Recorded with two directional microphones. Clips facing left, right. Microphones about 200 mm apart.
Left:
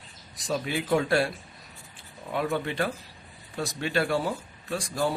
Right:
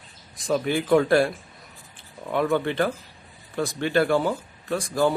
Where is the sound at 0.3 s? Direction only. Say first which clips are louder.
Right 6 dB; 50° right (ahead or behind).